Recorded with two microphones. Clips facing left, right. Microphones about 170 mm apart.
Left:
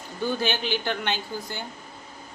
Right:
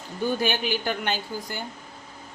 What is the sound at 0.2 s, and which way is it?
A man's voice, 15° right (ahead or behind).